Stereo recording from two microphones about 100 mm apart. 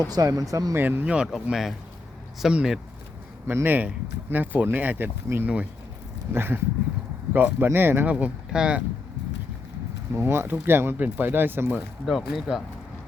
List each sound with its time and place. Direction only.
0.1 s speech: 35° right (ahead or behind)
0.9 s speech: 15° right (ahead or behind)
3.4 s speech: 20° right (ahead or behind)
10.2 s speech: 25° right (ahead or behind)
12.0 s speech: centre (ahead or behind)